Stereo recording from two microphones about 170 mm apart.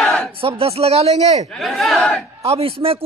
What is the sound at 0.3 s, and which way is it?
A man's voice, 35° right (ahead or behind).